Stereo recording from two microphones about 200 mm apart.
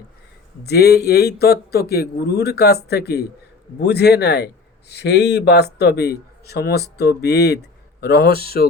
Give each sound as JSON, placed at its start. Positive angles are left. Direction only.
{"t": 0.6, "sound": "a man's voice", "side_deg": 55}